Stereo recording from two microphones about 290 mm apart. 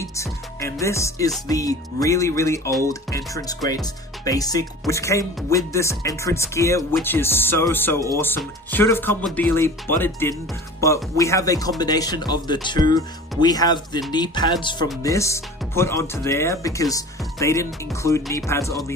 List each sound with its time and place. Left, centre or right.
0.0 s speech: centre